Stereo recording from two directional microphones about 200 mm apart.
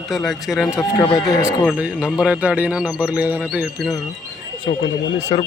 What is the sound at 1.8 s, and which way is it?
Speech, 5° right (ahead or behind).